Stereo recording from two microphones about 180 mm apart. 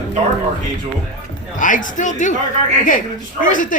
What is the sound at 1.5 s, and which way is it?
Speech, 45° left (ahead or behind).